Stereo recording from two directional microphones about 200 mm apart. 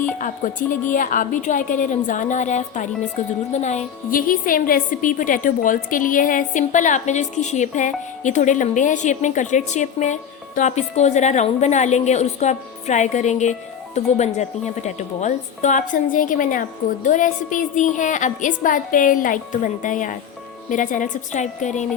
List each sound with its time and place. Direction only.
0.2 s a woman's voice: 40° left (ahead or behind)